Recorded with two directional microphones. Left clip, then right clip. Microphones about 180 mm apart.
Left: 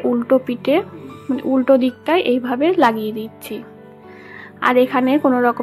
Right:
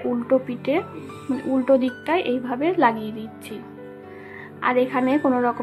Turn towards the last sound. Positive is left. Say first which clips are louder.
# left 5 dB
turn(degrees=25)  # may be behind; listen again after turning